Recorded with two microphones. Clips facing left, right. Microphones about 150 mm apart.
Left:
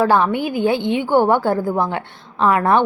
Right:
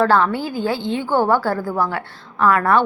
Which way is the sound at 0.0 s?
15° left (ahead or behind).